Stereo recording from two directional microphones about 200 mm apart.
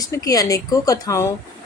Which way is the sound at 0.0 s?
15° left (ahead or behind).